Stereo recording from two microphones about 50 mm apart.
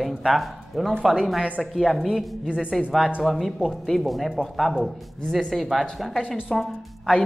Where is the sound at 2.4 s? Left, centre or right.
Centre.